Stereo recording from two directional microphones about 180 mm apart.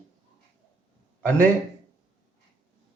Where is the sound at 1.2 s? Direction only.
10° left (ahead or behind).